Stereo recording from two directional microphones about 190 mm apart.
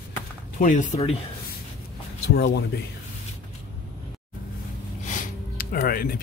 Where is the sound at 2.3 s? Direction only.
60° left (ahead or behind).